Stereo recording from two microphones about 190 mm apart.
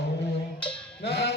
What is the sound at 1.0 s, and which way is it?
Music, 60° left (ahead or behind).